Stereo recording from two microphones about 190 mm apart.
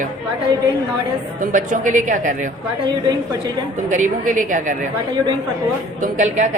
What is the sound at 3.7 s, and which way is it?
Speech, 40° right (ahead or behind).